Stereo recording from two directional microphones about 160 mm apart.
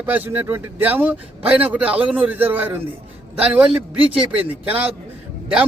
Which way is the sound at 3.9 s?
35° right (ahead or behind).